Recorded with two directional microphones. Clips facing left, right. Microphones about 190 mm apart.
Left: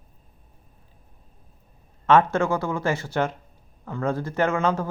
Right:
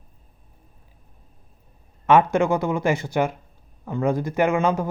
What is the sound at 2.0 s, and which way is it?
Speech, 10° right (ahead or behind).